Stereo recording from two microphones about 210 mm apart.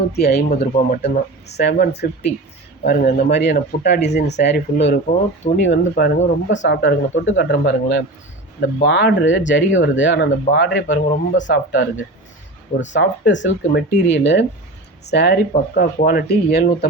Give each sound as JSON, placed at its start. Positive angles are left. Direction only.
{"t": 0.2, "sound": "speech", "side_deg": 50}